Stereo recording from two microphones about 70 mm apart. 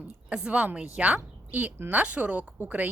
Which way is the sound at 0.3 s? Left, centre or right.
Centre.